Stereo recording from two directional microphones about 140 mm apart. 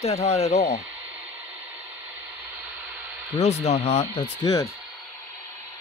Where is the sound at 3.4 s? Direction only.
50° left (ahead or behind).